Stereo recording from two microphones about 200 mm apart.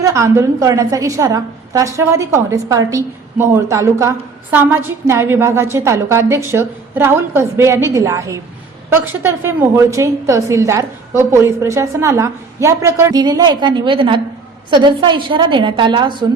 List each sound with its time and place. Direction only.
0.0 s a woman's voice: 15° right (ahead or behind)